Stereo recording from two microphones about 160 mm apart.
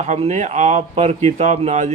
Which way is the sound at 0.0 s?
45° right (ahead or behind).